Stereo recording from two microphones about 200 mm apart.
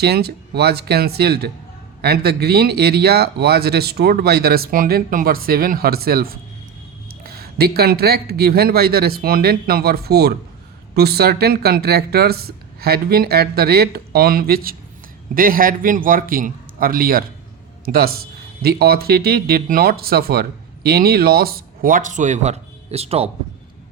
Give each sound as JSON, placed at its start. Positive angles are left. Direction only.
{"t": 0.0, "sound": "speech", "side_deg": -50}